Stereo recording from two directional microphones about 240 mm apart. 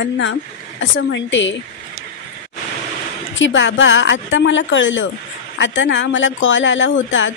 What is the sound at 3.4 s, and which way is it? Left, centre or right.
Speech, left.